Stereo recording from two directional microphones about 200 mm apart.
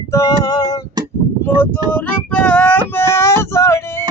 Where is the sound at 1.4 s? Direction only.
10° left (ahead or behind).